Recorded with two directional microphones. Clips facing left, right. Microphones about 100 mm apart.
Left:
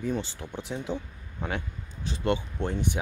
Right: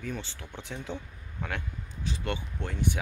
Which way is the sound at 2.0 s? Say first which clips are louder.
Left 6 dB; 35° left (ahead or behind).